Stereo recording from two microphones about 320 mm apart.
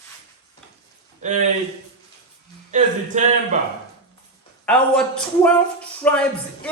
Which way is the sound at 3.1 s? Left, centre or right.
Right.